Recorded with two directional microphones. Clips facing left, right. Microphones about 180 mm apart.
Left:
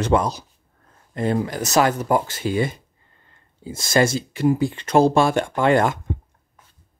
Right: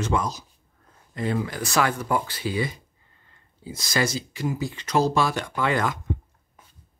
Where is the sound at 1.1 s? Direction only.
45° left (ahead or behind).